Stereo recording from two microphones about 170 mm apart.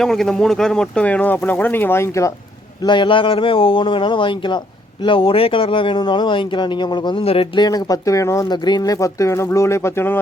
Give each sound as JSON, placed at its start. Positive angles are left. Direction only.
{"t": 0.0, "sound": "speech", "side_deg": 0}
{"t": 2.8, "sound": "speech", "side_deg": 30}